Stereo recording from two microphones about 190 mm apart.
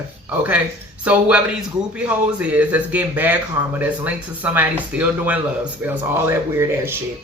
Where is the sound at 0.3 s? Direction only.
10° right (ahead or behind).